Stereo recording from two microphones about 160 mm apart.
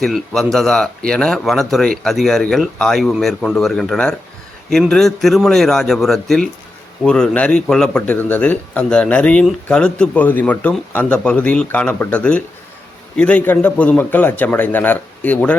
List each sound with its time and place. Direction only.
0.0 s a man's voice: centre (ahead or behind)